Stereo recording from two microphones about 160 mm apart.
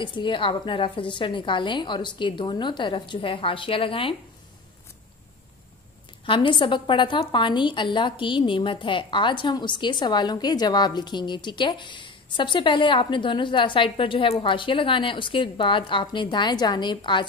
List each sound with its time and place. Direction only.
0.0 s a woman's voice: 30° left (ahead or behind)
6.2 s a woman's voice: 30° left (ahead or behind)